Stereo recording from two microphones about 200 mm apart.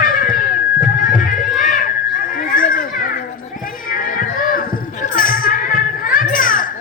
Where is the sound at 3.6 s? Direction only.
45° left (ahead or behind).